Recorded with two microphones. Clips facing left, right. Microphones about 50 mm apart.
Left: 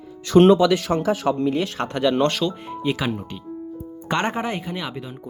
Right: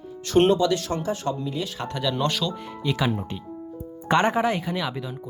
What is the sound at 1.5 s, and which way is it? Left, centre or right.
Speech, left.